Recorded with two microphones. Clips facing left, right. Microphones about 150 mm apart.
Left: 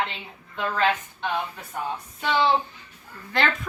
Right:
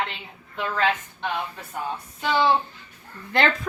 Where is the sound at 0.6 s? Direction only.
5° right (ahead or behind).